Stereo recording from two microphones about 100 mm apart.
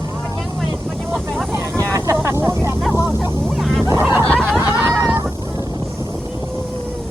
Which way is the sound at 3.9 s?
25° right (ahead or behind).